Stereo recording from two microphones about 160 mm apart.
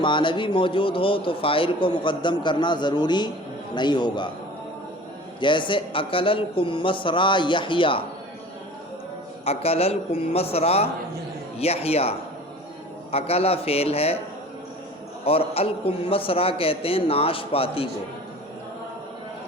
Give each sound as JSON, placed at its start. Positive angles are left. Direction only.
{"t": 0.0, "sound": "a man's voice", "side_deg": 30}
{"t": 5.4, "sound": "speech", "side_deg": 30}
{"t": 9.4, "sound": "speech", "side_deg": 40}
{"t": 15.2, "sound": "speech", "side_deg": 35}